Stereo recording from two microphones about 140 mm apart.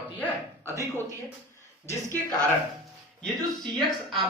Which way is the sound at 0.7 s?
20° right (ahead or behind).